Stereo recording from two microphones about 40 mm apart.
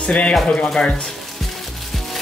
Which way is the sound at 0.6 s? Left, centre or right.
Centre.